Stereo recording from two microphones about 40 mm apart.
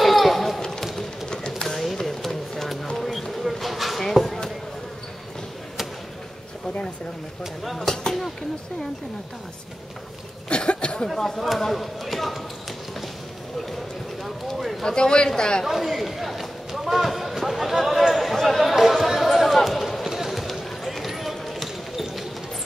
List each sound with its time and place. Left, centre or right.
0.0 s basketball bounce: centre
1.8 s music: centre
3.0 s a sound: centre
7.6 s speech: centre
7.9 s speech: centre
10.5 s a sound: left
11.1 s speech: centre
14.2 s a sound: centre
14.9 s speech: left
15.6 s run: centre
20.2 s basketball bounce: centre